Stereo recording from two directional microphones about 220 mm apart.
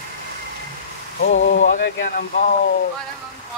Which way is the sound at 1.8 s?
50° left (ahead or behind).